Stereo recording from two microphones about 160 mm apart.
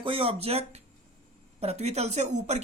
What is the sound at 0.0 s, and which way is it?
A woman's voice, 35° right (ahead or behind).